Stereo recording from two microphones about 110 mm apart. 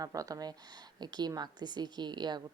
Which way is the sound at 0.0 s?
35° right (ahead or behind).